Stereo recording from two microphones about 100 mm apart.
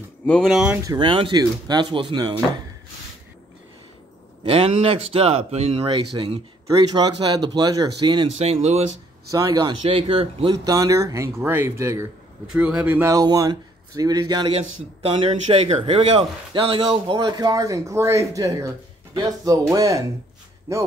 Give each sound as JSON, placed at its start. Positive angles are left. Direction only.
{"t": 0.4, "sound": "speech", "side_deg": -5}
{"t": 0.9, "sound": "speech", "side_deg": -60}
{"t": 1.3, "sound": "speech", "side_deg": -45}
{"t": 4.5, "sound": "speech", "side_deg": -80}
{"t": 6.2, "sound": "speech", "side_deg": -45}
{"t": 8.4, "sound": "speech", "side_deg": -90}
{"t": 9.3, "sound": "a man's voice", "side_deg": -40}
{"t": 9.8, "sound": "speech", "side_deg": -65}
{"t": 10.5, "sound": "a man's voice", "side_deg": -40}
{"t": 12.5, "sound": "speech", "side_deg": -15}
{"t": 13.1, "sound": "a man's voice", "side_deg": -35}
{"t": 14.5, "sound": "speech", "side_deg": -70}
{"t": 15.8, "sound": "a man's voice", "side_deg": -60}